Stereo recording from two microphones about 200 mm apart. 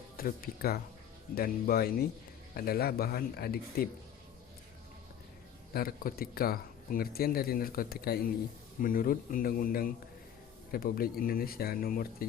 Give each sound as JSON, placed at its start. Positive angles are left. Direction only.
{"t": 0.2, "sound": "speech", "side_deg": 45}
{"t": 5.7, "sound": "speech", "side_deg": 45}